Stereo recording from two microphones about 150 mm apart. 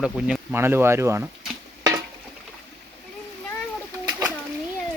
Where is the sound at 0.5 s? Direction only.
15° right (ahead or behind).